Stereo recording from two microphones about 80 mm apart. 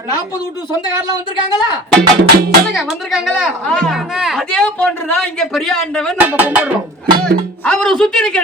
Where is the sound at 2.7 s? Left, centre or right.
Centre.